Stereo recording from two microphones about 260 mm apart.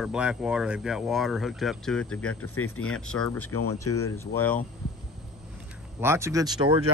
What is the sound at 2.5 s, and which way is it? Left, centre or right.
Speech, left.